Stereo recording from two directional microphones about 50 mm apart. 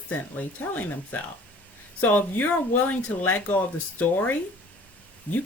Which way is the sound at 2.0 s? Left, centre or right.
Left.